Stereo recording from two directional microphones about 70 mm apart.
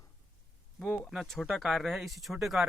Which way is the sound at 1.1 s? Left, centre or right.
Centre.